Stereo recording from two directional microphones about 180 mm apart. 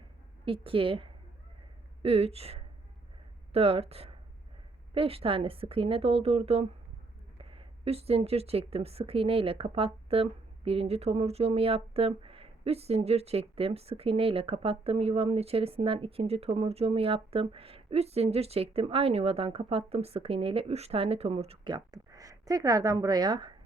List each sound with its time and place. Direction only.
0.4 s speech: 30° right (ahead or behind)